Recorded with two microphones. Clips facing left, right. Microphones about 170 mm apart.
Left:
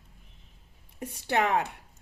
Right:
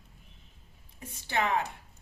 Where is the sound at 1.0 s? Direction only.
65° left (ahead or behind).